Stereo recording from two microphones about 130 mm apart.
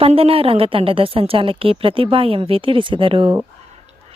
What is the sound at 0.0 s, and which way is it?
Speech, 45° right (ahead or behind).